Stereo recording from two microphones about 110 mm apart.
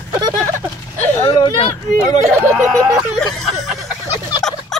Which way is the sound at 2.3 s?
20° right (ahead or behind).